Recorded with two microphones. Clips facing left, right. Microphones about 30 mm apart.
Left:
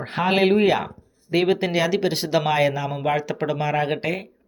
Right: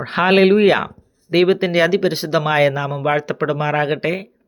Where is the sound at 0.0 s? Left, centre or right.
Right.